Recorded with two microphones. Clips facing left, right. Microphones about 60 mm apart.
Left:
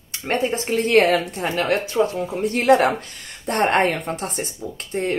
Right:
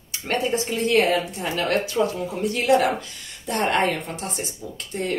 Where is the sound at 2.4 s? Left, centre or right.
Left.